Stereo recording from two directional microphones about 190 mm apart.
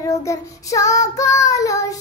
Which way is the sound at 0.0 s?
15° left (ahead or behind).